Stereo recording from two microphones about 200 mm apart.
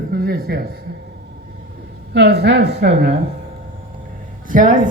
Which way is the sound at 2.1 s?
55° right (ahead or behind).